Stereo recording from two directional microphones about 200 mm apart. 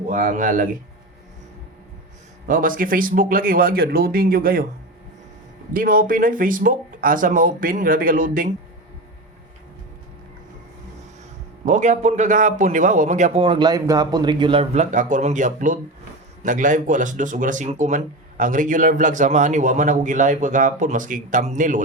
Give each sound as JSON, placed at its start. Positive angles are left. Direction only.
{"t": 0.1, "sound": "speech", "side_deg": -40}
{"t": 2.5, "sound": "speech", "side_deg": -45}
{"t": 5.7, "sound": "speech", "side_deg": -45}
{"t": 11.6, "sound": "speech", "side_deg": -40}